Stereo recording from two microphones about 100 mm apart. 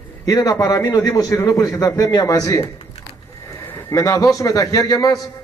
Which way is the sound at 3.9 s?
30° left (ahead or behind).